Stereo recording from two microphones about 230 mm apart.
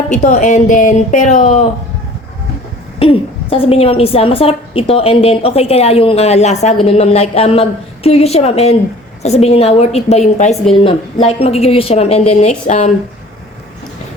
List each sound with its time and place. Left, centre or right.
0.1 s speech: left
3.0 s a woman's voice: left